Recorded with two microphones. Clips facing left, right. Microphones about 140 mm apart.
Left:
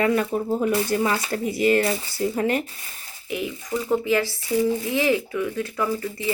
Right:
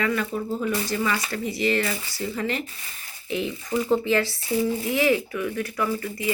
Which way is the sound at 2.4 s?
50° left (ahead or behind).